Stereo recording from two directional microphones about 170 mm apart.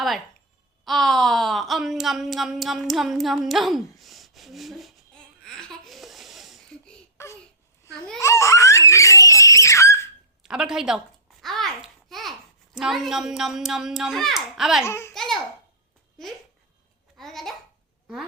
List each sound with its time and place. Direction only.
0.9 s speech: centre (ahead or behind)
3.9 s a sound: centre (ahead or behind)
7.2 s a sound: 15° left (ahead or behind)
8.2 s baby laughter: 15° left (ahead or behind)
10.4 s speech: 5° right (ahead or behind)
11.4 s babbling: centre (ahead or behind)
12.7 s speech: centre (ahead or behind)
14.8 s a child's voice: 15° left (ahead or behind)
15.1 s a child's voice: centre (ahead or behind)
17.2 s speech: centre (ahead or behind)